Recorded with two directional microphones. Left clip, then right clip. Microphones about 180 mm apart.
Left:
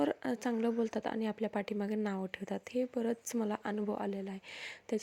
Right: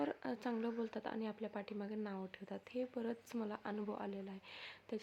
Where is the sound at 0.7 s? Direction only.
35° left (ahead or behind).